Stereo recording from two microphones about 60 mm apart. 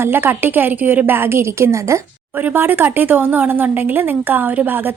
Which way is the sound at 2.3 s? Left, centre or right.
Right.